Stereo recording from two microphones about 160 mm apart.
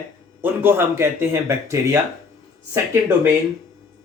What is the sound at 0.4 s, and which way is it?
Speech, 15° right (ahead or behind).